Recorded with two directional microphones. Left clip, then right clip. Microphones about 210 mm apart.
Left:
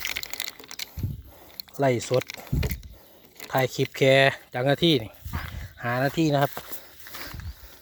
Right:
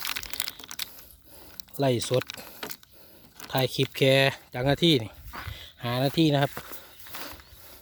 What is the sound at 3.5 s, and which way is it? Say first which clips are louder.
Speech: left 2 dB; centre (ahead or behind).